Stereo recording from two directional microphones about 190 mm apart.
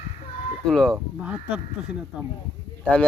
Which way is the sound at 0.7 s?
Centre (ahead or behind).